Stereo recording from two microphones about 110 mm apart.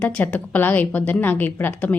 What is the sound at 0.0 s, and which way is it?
A woman's voice, 10° left (ahead or behind).